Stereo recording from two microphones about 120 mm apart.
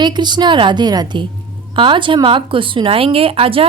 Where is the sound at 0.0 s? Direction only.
40° right (ahead or behind).